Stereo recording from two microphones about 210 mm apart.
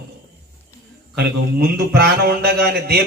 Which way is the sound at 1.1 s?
50° right (ahead or behind).